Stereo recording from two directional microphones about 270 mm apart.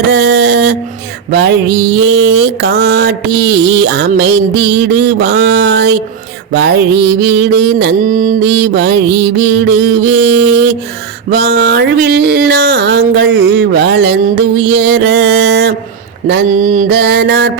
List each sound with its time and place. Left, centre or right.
0.1 s mantra: right